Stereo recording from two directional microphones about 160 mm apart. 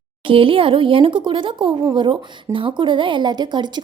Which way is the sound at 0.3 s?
35° right (ahead or behind).